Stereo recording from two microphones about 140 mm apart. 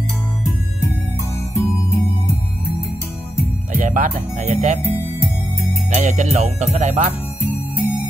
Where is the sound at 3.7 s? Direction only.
65° right (ahead or behind).